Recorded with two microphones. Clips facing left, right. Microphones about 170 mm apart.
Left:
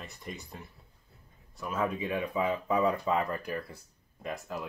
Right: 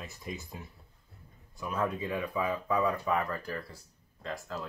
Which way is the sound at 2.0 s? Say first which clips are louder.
Left 2 dB; 20° left (ahead or behind).